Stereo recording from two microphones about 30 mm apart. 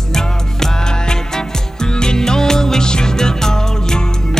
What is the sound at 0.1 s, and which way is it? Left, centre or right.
Music, centre.